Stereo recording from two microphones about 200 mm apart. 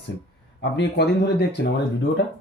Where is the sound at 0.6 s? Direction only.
55° left (ahead or behind).